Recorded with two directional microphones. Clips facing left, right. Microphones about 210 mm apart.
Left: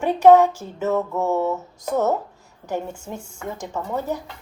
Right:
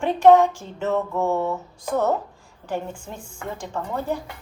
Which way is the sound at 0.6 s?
5° left (ahead or behind).